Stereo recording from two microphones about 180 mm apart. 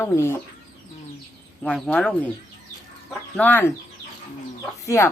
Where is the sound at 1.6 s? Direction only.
5° left (ahead or behind).